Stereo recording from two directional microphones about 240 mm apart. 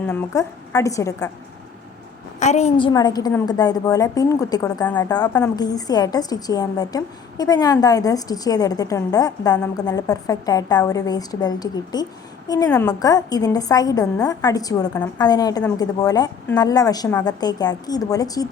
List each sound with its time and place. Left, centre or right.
0.1 s a woman's voice: centre
2.4 s a woman's voice: left